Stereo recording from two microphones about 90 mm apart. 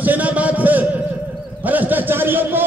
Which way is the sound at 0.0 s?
15° right (ahead or behind).